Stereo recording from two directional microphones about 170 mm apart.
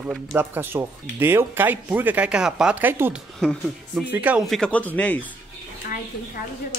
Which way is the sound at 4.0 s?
10° right (ahead or behind).